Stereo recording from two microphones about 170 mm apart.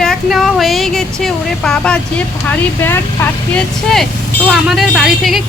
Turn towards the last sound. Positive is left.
turn(degrees=0)  # may be behind; listen again after turning